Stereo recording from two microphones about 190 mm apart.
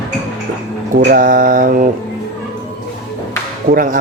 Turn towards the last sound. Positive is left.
turn(degrees=-40)  # may be behind; listen again after turning